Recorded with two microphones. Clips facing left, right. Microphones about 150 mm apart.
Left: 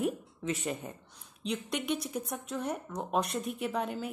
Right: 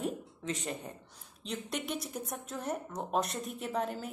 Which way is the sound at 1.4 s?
Centre (ahead or behind).